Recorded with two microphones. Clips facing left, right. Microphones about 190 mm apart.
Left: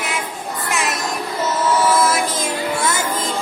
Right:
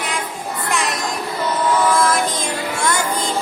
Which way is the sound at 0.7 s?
5° left (ahead or behind).